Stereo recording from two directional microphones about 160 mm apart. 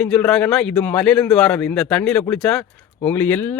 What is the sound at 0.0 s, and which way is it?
A man's voice, 5° left (ahead or behind).